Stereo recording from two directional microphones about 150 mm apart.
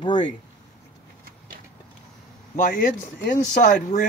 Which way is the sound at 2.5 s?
70° left (ahead or behind).